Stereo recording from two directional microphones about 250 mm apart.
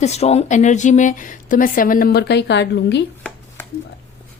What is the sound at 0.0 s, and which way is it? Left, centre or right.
Speech, left.